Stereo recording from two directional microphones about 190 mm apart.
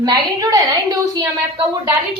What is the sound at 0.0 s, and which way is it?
Speech, 20° right (ahead or behind).